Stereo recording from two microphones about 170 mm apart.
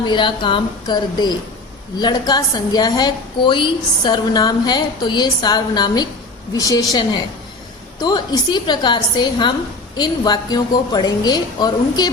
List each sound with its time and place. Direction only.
0.0 s a woman's voice: 25° left (ahead or behind)